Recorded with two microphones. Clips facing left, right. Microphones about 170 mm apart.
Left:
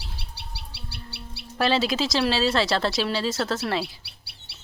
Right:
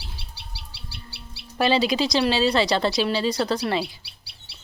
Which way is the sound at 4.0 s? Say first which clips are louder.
Left 1 dB; 60° left (ahead or behind).